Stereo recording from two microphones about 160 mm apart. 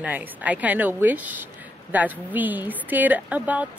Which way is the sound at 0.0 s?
10° right (ahead or behind).